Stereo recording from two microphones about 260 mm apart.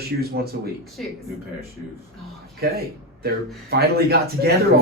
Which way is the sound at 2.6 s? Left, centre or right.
Right.